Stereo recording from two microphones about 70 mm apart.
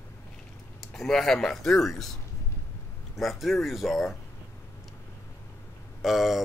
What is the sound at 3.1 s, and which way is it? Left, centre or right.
Speech, centre.